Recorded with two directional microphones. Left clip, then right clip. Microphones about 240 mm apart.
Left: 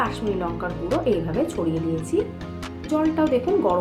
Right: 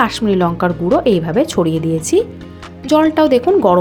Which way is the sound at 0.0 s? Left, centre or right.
Right.